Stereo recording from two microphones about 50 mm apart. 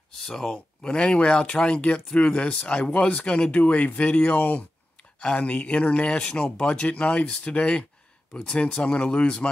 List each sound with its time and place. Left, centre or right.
0.2 s speech: centre
0.9 s speech: centre